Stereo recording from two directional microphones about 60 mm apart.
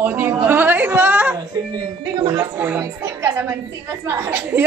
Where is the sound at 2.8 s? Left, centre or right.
Right.